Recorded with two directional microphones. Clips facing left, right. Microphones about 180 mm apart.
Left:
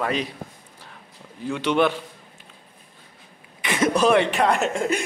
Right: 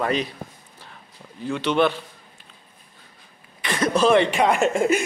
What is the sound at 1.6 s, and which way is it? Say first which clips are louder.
Speech: even; 10° left (ahead or behind).